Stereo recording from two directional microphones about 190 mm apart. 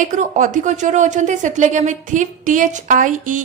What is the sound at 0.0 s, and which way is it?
A woman's voice, 40° right (ahead or behind).